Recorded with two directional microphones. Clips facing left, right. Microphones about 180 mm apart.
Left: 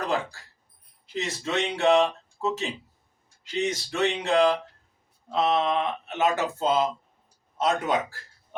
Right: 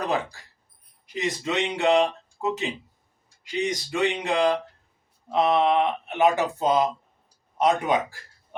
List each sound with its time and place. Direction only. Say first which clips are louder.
0.0 s speech: right 1 dB; 15° right (ahead or behind)